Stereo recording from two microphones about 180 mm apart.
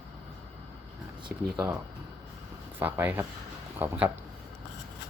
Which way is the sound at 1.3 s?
5° right (ahead or behind).